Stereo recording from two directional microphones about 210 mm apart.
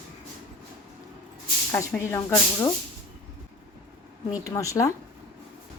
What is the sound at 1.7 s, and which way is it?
Speech, 10° left (ahead or behind).